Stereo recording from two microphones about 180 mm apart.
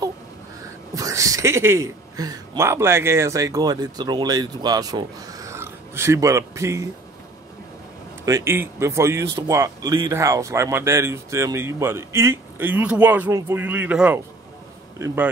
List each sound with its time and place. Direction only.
0.9 s speech: 20° right (ahead or behind)
8.3 s speech: 15° right (ahead or behind)